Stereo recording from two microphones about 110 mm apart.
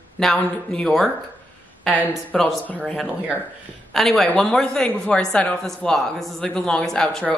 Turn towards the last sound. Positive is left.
turn(degrees=5)  # may be behind; listen again after turning